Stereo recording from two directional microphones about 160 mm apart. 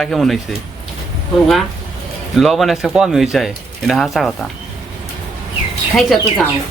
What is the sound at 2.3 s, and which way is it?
Speech, centre (ahead or behind).